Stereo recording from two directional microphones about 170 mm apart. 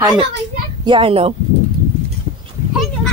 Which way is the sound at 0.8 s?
30° right (ahead or behind).